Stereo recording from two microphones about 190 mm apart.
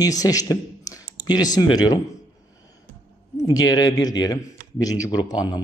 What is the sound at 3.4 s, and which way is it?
A man's voice, 20° left (ahead or behind).